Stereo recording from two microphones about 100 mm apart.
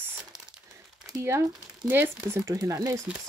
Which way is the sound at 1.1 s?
30° right (ahead or behind).